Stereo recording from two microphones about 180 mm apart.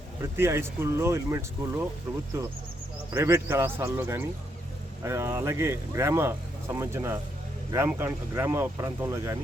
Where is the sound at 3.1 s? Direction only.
15° right (ahead or behind).